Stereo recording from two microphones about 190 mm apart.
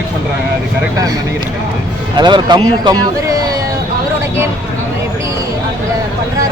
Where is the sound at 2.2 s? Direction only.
25° right (ahead or behind).